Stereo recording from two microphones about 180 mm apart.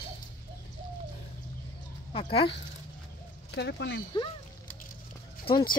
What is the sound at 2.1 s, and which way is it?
Speech, 30° left (ahead or behind).